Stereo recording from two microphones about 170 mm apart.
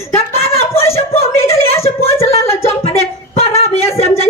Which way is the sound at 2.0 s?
35° left (ahead or behind).